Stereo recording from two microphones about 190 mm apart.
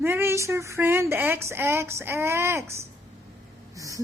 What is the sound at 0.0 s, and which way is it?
Speech, 10° right (ahead or behind).